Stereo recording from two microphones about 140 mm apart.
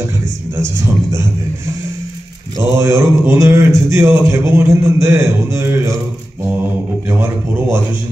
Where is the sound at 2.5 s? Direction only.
20° right (ahead or behind).